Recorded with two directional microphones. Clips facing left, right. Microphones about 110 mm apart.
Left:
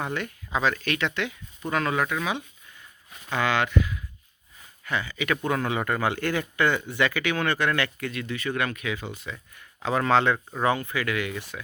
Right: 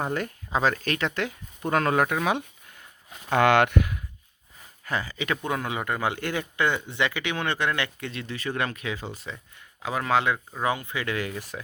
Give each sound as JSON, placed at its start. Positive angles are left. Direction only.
{"t": 0.0, "sound": "speech", "side_deg": -40}
{"t": 4.9, "sound": "speech", "side_deg": -35}
{"t": 5.4, "sound": "speech", "side_deg": -15}
{"t": 9.8, "sound": "speech", "side_deg": -10}